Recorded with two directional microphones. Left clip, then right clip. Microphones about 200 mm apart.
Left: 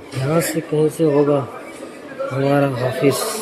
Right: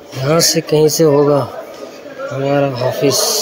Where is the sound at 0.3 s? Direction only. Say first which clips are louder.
Right 7 dB; 25° right (ahead or behind).